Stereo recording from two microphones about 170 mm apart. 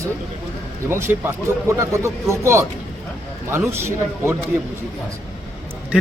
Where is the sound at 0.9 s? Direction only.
15° right (ahead or behind).